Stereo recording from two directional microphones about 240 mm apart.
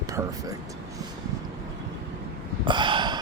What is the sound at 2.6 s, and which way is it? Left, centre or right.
Gasp, centre.